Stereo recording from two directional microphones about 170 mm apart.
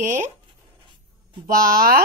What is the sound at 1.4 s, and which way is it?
Speech, 55° right (ahead or behind).